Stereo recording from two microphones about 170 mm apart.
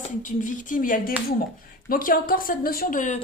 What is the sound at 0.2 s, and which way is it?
A woman's voice, 50° left (ahead or behind).